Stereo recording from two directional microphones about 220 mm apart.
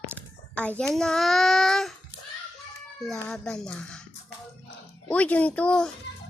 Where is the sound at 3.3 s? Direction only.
5° left (ahead or behind).